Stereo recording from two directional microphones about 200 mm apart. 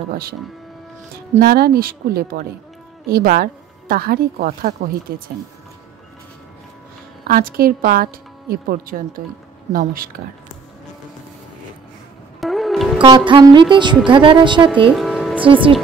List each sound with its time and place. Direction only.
1.4 s a woman's voice: 50° right (ahead or behind)
7.2 s speech: 45° right (ahead or behind)
12.4 s music: centre (ahead or behind)
13.0 s a woman's voice: 25° right (ahead or behind)
15.0 s music: centre (ahead or behind)
15.3 s a woman's voice: 25° right (ahead or behind)